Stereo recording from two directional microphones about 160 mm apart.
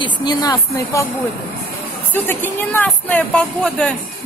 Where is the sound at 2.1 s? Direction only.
10° left (ahead or behind).